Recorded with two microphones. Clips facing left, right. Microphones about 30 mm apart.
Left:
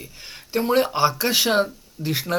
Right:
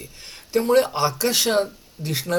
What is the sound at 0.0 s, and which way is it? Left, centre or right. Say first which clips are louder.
Speech: left 1 dB; centre.